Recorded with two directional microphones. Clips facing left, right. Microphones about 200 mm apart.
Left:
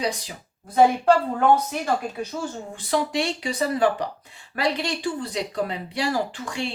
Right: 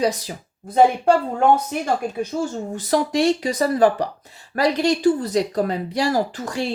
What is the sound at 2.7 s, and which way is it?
Speech, 40° right (ahead or behind).